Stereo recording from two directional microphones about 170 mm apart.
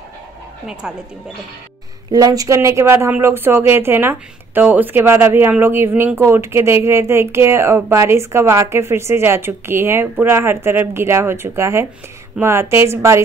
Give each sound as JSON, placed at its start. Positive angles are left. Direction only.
{"t": 0.8, "sound": "speech", "side_deg": -5}
{"t": 2.0, "sound": "speech", "side_deg": -20}